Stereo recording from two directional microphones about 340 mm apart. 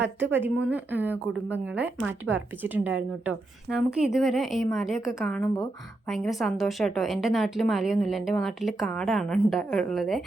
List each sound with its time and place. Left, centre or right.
0.2 s speech: centre